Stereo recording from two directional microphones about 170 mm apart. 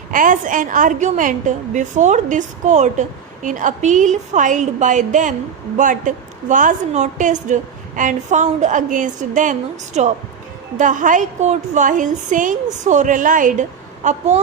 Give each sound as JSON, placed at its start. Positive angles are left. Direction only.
{"t": 0.1, "sound": "a woman's voice", "side_deg": -50}